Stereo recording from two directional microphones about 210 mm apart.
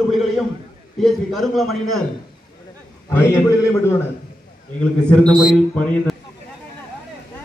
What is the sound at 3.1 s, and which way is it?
Speech, 10° left (ahead or behind).